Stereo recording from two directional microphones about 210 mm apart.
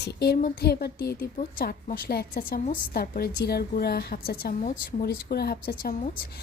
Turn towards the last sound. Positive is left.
turn(degrees=45)  # may be behind; listen again after turning